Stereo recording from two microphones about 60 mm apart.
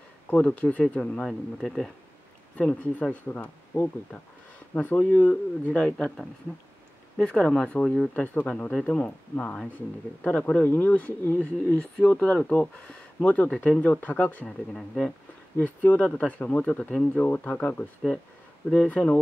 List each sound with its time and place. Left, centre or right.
0.3 s speech: left
1.2 s speech: centre
2.5 s speech: left
3.7 s speech: left
4.7 s speech: left
7.2 s speech: centre
8.1 s speech: left
14.7 s speech: centre
15.6 s speech: left